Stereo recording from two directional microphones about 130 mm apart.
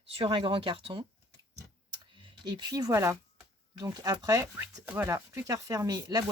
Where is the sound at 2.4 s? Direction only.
35° right (ahead or behind).